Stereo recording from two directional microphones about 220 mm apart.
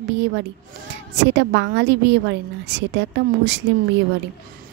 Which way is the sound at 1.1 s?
50° right (ahead or behind).